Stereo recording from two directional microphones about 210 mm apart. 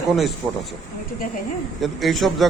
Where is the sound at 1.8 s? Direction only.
Centre (ahead or behind).